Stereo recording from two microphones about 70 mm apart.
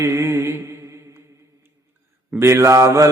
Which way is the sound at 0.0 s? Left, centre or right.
Right.